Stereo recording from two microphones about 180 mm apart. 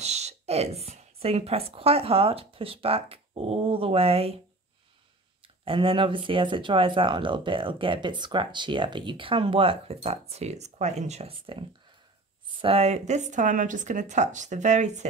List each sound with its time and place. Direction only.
0.0 s a woman's voice: 40° right (ahead or behind)
5.7 s speech: 30° right (ahead or behind)